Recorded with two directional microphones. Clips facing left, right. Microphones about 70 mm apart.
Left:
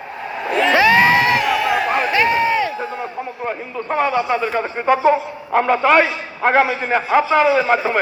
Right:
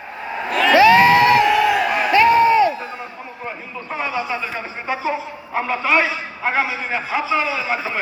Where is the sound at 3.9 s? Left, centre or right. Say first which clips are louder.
Left 6 dB; left.